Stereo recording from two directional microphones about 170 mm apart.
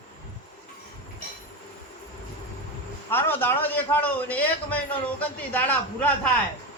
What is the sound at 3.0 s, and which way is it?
A man's voice, 10° left (ahead or behind).